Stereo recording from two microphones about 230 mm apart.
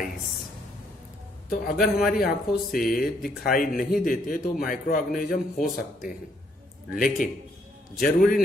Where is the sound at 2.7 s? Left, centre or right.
Left.